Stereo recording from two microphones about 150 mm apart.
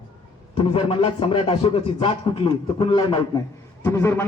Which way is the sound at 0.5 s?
35° left (ahead or behind).